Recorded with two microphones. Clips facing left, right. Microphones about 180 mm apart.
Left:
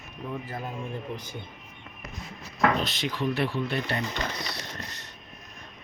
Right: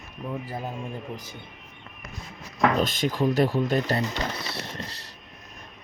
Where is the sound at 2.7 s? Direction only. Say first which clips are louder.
Right 4 dB; 50° right (ahead or behind).